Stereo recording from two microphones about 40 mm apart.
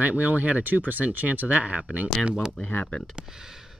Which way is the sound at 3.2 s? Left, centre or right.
Centre.